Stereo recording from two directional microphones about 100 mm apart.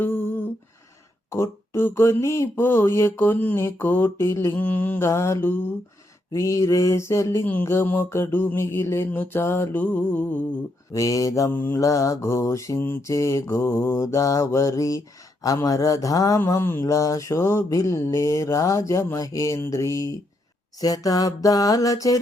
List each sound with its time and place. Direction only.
0.0 s a sound: 20° left (ahead or behind)
1.3 s mantra: 25° left (ahead or behind)
4.6 s mantra: 15° left (ahead or behind)
10.9 s mantra: 35° left (ahead or behind)
11.5 s mantra: 20° left (ahead or behind)
11.8 s mantra: 35° left (ahead or behind)
16.4 s mantra: 25° left (ahead or behind)